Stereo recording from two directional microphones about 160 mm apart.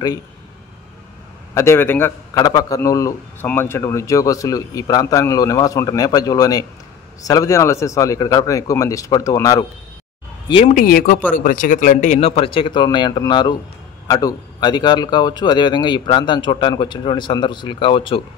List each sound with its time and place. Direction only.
1.5 s a man's voice: 15° left (ahead or behind)
10.7 s a man's voice: 65° left (ahead or behind); by 18.2 s 30° left (ahead or behind)